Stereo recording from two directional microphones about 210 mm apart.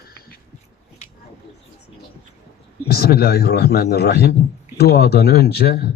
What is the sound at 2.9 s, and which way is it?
Speech, 45° left (ahead or behind).